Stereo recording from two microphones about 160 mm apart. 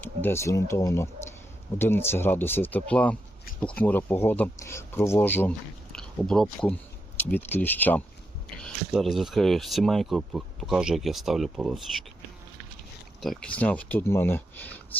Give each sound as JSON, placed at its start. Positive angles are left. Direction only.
{"t": 0.0, "sound": "speech", "side_deg": 10}
{"t": 8.6, "sound": "speech", "side_deg": 0}
{"t": 13.2, "sound": "speech", "side_deg": 5}